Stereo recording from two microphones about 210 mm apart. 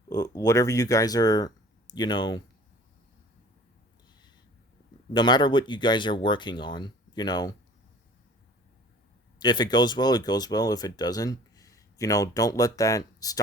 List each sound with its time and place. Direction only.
0.1 s speech: 15° left (ahead or behind)
5.1 s speech: 20° left (ahead or behind)
9.4 s speech: 20° left (ahead or behind)